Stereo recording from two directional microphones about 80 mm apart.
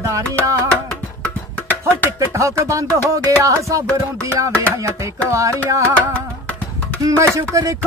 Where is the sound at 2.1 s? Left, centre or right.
Right.